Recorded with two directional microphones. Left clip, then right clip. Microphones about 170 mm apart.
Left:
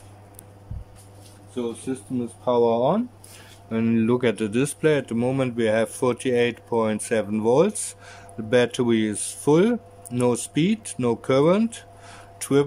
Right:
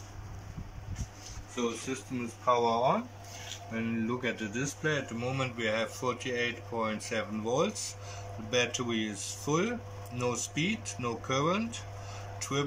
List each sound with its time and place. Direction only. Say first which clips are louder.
2.4 s speech: left 7 dB; 45° left (ahead or behind)
3.7 s speech: left 12 dB; 90° left; by 11.7 s 60° left (ahead or behind)
12.4 s a sound: left 13 dB; 65° left (ahead or behind)